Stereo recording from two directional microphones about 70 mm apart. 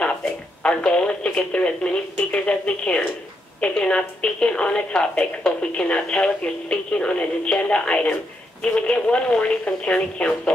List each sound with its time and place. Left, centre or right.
0.0 s a woman's voice: centre